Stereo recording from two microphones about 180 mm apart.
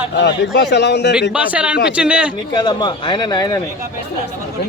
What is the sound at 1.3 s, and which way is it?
Speech, 5° right (ahead or behind).